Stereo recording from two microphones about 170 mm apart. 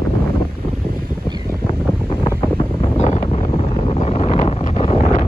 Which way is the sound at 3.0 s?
40° left (ahead or behind).